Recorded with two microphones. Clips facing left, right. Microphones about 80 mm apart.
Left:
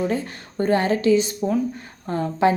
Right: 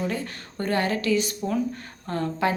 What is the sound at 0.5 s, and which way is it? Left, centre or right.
A woman's voice, left.